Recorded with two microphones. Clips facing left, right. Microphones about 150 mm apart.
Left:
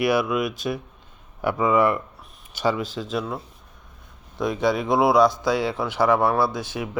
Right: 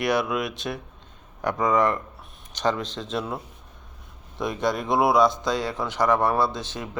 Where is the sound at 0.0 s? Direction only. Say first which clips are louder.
Left 3 dB; 5° left (ahead or behind).